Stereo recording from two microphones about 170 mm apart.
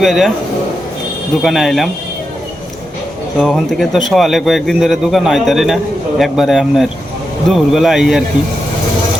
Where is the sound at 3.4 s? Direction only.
Centre (ahead or behind).